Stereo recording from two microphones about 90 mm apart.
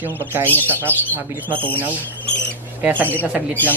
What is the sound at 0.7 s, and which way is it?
Speech, 25° right (ahead or behind).